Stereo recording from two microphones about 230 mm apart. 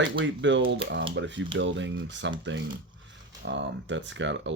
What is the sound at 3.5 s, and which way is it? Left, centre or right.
Speech, right.